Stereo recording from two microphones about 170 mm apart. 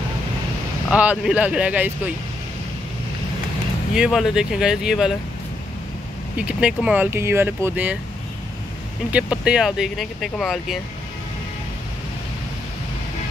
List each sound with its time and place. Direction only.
0.8 s speech: 5° right (ahead or behind)
3.9 s speech: 5° right (ahead or behind)
6.3 s speech: 5° right (ahead or behind)
9.1 s speech: 5° right (ahead or behind)